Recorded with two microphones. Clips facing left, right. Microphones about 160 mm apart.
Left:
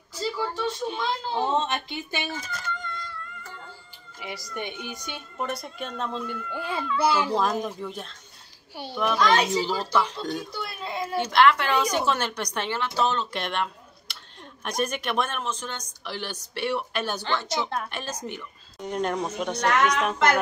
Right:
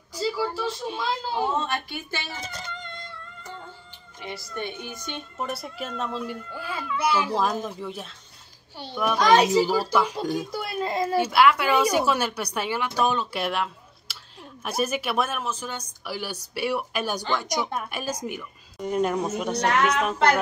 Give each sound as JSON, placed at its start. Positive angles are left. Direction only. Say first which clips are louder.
{"t": 0.1, "sound": "a sound", "louder": "right 2 dB", "side_deg": -10}
{"t": 1.5, "sound": "speech", "louder": "left 1 dB", "side_deg": 20}
{"t": 2.5, "sound": "music", "louder": "left 3 dB", "side_deg": -25}
{"t": 4.2, "sound": "speech", "louder": "right 1 dB", "side_deg": 15}
{"t": 5.4, "sound": "speech", "louder": "left 1 dB", "side_deg": -5}
{"t": 6.5, "sound": "speech", "louder": "left 2 dB", "side_deg": 25}
{"t": 7.6, "sound": "speech", "louder": "even", "side_deg": -5}
{"t": 8.7, "sound": "speech", "louder": "left 1 dB", "side_deg": 10}
{"t": 9.2, "sound": "a woman's voice", "louder": "right 4 dB", "side_deg": -40}
{"t": 9.6, "sound": "a woman's voice", "louder": "right 4 dB", "side_deg": -10}
{"t": 10.5, "sound": "speech", "louder": "right 6 dB", "side_deg": -40}
{"t": 11.1, "sound": "a woman's voice", "louder": "even", "side_deg": -10}
{"t": 19.5, "sound": "a woman's voice", "louder": "even", "side_deg": -30}